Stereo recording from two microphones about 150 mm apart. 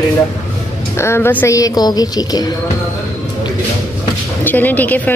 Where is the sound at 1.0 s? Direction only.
15° left (ahead or behind).